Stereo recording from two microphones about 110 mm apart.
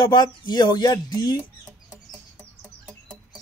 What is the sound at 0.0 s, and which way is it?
Speech, 40° left (ahead or behind).